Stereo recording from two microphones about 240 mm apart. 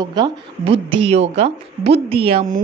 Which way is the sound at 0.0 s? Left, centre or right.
Centre.